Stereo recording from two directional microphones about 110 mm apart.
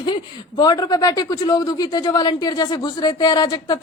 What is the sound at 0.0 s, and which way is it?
A woman's voice, 40° left (ahead or behind).